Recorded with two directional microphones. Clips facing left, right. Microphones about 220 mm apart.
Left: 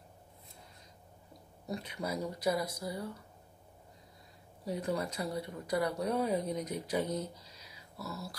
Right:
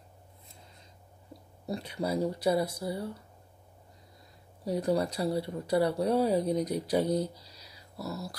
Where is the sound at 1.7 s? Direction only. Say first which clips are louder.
Right 5 dB; 30° right (ahead or behind).